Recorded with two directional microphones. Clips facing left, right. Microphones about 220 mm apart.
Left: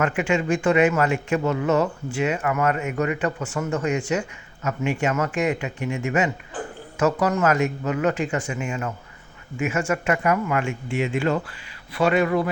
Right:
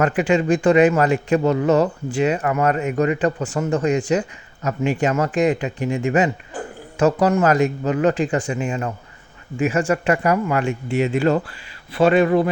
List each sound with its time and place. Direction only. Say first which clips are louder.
0.0 s speech: right 4 dB; 35° right (ahead or behind)
11.9 s a man's voice: right 5 dB; 30° right (ahead or behind)